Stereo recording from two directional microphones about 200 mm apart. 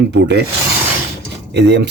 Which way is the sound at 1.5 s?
60° right (ahead or behind).